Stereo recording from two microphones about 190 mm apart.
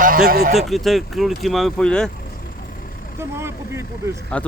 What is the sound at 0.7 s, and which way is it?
Speech, centre (ahead or behind).